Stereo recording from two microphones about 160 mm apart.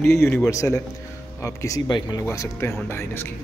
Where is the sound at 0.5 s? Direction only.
20° left (ahead or behind).